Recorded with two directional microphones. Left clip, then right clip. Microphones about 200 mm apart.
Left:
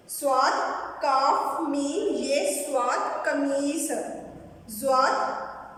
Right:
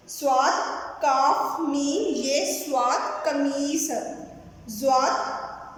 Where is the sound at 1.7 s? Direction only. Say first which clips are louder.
Right 1 dB; 15° right (ahead or behind).